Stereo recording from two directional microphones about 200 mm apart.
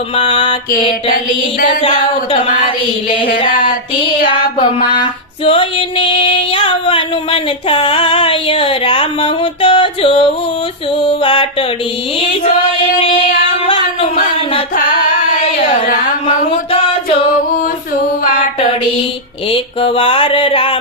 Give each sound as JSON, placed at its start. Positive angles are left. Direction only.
{"t": 0.2, "sound": "singing", "side_deg": 30}
{"t": 1.1, "sound": "music", "side_deg": 45}
{"t": 1.8, "sound": "singing", "side_deg": 25}
{"t": 3.5, "sound": "music", "side_deg": 45}
{"t": 5.5, "sound": "singing", "side_deg": 25}
{"t": 13.7, "sound": "a sound", "side_deg": 25}
{"t": 19.5, "sound": "singing", "side_deg": 25}